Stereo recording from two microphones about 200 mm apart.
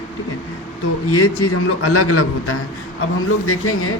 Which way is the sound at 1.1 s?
90° left.